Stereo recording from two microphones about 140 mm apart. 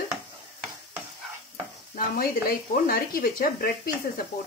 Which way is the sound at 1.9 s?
90° left.